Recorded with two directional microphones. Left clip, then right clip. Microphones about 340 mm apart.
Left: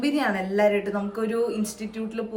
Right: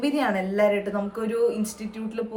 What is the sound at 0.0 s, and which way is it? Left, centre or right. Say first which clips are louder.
A woman's voice: even; centre.